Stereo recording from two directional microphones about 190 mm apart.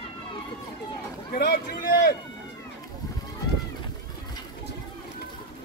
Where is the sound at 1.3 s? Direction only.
50° left (ahead or behind).